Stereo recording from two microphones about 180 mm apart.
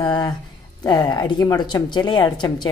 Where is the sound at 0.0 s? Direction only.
25° left (ahead or behind).